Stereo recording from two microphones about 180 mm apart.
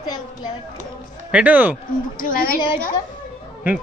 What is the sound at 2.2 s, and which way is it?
Speech, 50° left (ahead or behind).